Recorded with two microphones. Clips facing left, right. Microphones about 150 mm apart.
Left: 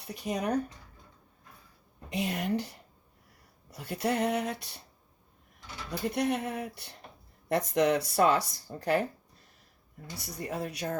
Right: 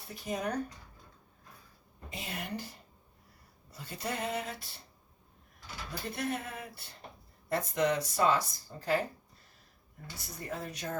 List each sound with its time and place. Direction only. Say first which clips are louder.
0.1 s speech: left 4 dB; 75° left (ahead or behind)
2.0 s speech: left 9 dB; 70° left (ahead or behind)
5.9 s speech: left 6 dB; 75° left (ahead or behind)
10.2 s speech: left 5 dB; 70° left (ahead or behind)